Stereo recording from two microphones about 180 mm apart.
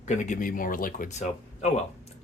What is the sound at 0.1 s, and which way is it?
Speech, 45° left (ahead or behind).